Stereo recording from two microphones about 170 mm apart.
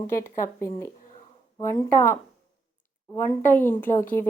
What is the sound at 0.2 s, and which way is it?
Speech, 15° left (ahead or behind).